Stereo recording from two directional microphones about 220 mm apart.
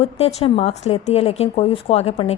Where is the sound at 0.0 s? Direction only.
30° left (ahead or behind).